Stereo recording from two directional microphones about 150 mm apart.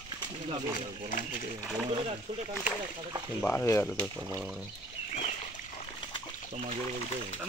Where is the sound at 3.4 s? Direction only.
15° left (ahead or behind).